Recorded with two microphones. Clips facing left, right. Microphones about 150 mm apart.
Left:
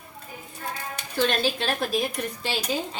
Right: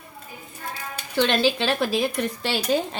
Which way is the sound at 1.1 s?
80° right.